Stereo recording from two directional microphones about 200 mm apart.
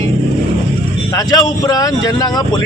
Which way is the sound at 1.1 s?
20° left (ahead or behind).